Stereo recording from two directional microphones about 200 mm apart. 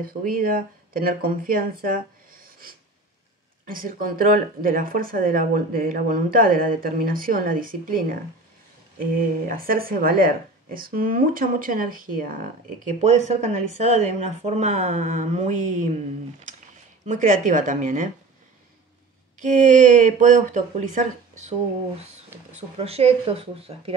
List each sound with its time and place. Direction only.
0.0 s speech: 45° right (ahead or behind)
9.5 s speech: 45° right (ahead or behind)
17.0 s speech: 35° right (ahead or behind)
19.4 s speech: 40° right (ahead or behind)
22.3 s a sound: 10° right (ahead or behind)
22.8 s speech: 30° right (ahead or behind)